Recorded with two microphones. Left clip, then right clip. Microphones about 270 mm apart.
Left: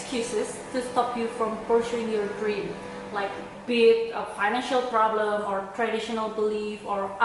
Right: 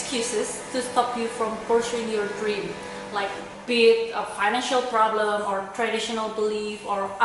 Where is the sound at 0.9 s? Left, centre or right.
Centre.